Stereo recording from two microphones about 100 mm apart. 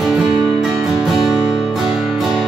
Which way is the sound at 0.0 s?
5° right (ahead or behind).